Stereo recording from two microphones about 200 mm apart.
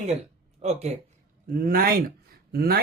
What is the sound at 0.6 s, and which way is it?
Speech, 35° right (ahead or behind).